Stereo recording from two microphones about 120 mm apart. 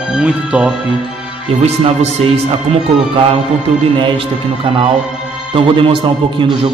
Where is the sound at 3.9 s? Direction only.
45° right (ahead or behind).